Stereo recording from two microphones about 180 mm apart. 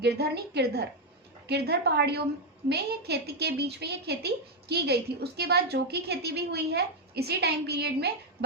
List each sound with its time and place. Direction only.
0.0 s a woman's voice: 65° right (ahead or behind)